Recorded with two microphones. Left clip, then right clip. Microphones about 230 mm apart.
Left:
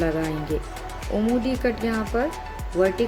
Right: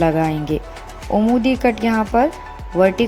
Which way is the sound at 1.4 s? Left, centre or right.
Right.